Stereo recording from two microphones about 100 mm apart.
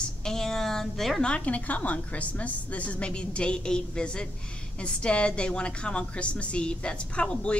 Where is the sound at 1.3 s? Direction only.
15° left (ahead or behind).